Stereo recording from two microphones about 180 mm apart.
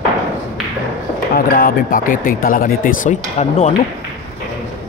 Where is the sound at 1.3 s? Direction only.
55° left (ahead or behind).